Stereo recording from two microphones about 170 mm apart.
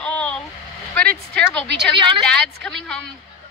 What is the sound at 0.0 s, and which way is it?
Vehicle, 5° left (ahead or behind).